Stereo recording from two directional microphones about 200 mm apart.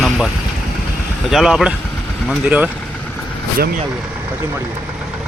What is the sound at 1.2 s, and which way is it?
Speech, centre (ahead or behind).